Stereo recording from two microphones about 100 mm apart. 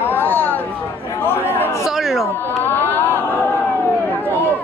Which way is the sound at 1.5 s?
20° left (ahead or behind).